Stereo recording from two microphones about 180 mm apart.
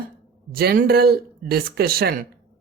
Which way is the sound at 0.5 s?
55° right (ahead or behind).